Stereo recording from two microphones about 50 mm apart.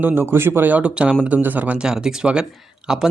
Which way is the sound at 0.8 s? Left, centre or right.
Right.